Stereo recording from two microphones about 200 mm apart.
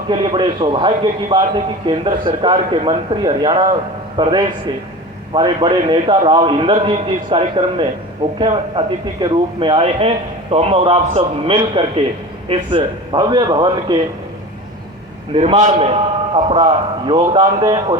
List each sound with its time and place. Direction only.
0.1 s a man's voice: 25° right (ahead or behind)
15.4 s a man's voice: 35° right (ahead or behind)